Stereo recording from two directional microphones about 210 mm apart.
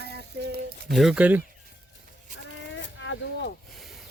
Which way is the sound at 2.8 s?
60° left (ahead or behind).